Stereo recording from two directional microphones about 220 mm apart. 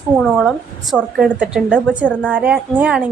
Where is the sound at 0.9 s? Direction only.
5° right (ahead or behind).